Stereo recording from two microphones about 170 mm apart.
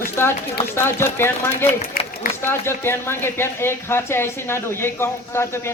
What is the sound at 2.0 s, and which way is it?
Run, 55° left (ahead or behind).